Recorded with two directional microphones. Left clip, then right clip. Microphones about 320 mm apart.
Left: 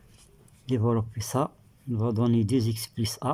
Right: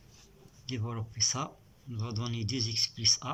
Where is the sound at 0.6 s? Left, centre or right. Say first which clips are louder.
Left 13 dB; left.